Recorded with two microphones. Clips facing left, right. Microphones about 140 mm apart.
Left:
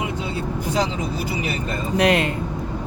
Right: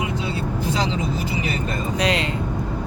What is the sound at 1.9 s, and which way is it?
Speech, 55° left (ahead or behind).